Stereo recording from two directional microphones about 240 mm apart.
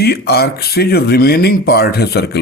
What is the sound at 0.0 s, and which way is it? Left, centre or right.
Speech, left.